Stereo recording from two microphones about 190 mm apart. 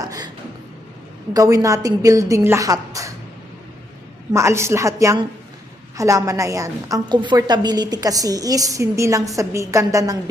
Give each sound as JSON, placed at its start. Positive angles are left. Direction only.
{"t": 1.3, "sound": "a woman's voice", "side_deg": -20}
{"t": 4.3, "sound": "a woman's voice", "side_deg": -15}